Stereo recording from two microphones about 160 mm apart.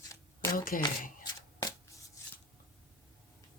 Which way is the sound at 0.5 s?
60° left (ahead or behind).